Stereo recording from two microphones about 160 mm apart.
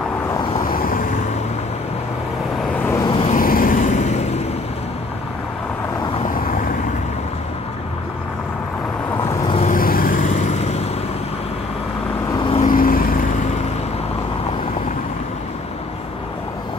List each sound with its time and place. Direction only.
0.7 s vehicle: 60° left (ahead or behind)
2.8 s vehicle: 15° left (ahead or behind)
3.3 s vehicle: 60° left (ahead or behind); by 4.4 s 45° left (ahead or behind)
9.7 s vehicle: 65° left (ahead or behind); by 10.9 s 45° left (ahead or behind)
12.4 s vehicle: 35° left (ahead or behind)
12.6 s vehicle: 60° left (ahead or behind)